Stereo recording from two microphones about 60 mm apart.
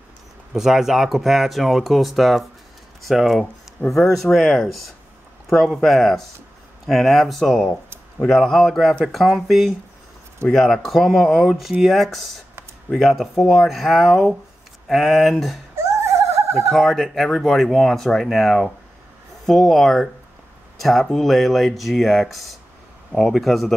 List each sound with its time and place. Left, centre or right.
0.5 s speech: centre
15.7 s giggle: right
16.7 s speech: centre